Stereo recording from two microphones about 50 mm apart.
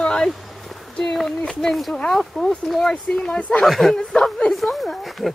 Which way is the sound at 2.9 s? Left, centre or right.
Centre.